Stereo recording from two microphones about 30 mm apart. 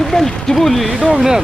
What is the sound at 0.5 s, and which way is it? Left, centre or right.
Speech, centre.